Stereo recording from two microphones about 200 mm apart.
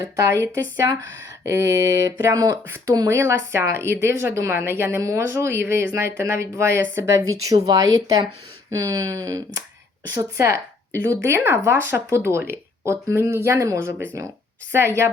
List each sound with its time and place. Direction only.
0.0 s speech: 15° right (ahead or behind)
1.5 s speech: 15° right (ahead or behind)